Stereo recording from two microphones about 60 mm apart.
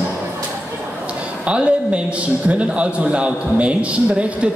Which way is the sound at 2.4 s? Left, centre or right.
Centre.